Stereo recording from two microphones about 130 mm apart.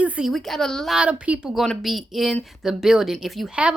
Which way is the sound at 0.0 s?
5° right (ahead or behind).